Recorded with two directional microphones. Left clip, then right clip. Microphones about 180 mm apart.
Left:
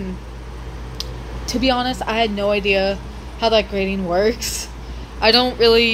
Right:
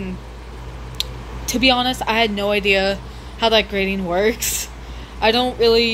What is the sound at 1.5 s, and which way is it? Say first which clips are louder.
Speech: right 2 dB; 5° right (ahead or behind).